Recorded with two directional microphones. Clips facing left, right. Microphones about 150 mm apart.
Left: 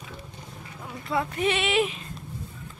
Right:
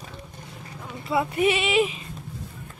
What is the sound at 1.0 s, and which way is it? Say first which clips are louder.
Speech: right 4 dB; 10° right (ahead or behind).